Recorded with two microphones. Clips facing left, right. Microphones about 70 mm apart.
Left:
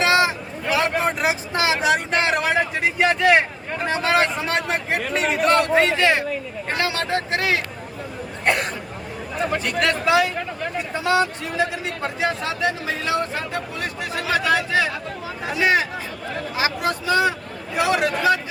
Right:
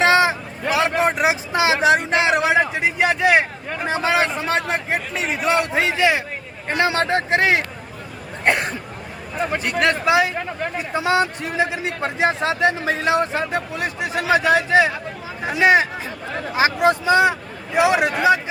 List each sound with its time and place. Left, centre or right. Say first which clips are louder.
0.0 s a sound: right 3 dB; right
0.7 s vehicle: right 2 dB; right
3.0 s a man's voice: even; centre
6.7 s speech: right 5 dB; right
9.5 s speech: right 3 dB; right
10.9 s speech: right 1 dB; centre
12.0 s speech: right 4 dB; right